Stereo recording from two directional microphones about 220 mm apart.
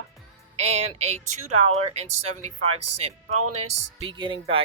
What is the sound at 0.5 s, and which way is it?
A woman's voice, 30° right (ahead or behind).